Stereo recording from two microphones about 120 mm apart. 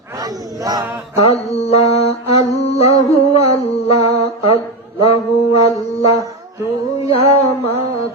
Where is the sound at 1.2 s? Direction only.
60° left (ahead or behind).